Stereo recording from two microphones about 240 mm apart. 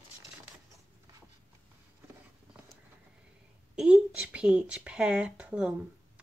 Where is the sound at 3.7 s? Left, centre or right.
Centre.